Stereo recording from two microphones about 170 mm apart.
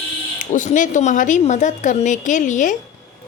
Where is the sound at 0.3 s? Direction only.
50° left (ahead or behind).